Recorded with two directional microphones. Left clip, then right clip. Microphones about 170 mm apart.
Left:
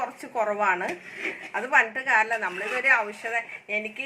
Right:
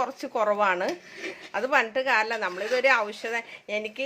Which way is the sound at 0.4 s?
80° right.